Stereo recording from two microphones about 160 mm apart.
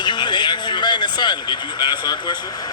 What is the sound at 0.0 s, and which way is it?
A man's voice, 30° left (ahead or behind).